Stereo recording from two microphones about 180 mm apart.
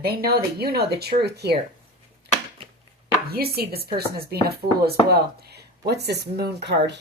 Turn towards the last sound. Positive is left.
turn(degrees=-70)  # may be behind; listen again after turning